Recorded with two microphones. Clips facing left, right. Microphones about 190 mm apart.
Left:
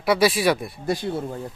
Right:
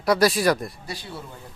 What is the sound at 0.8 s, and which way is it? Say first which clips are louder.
Speech: left 11 dB; 50° left (ahead or behind).